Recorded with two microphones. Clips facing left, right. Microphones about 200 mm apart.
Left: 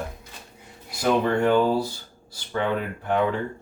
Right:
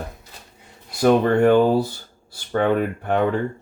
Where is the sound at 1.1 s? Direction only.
55° right (ahead or behind).